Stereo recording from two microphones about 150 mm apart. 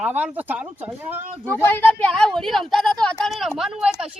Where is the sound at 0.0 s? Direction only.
10° right (ahead or behind).